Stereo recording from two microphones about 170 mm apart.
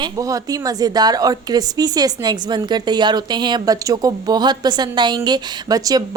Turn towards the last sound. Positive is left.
turn(degrees=-20)  # may be behind; listen again after turning